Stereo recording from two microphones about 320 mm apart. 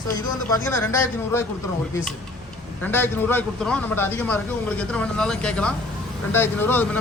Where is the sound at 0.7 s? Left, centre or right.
Centre.